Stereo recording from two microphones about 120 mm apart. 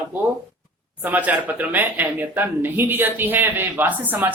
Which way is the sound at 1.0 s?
15° right (ahead or behind).